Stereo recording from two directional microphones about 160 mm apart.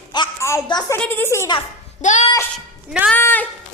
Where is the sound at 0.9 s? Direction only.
10° left (ahead or behind).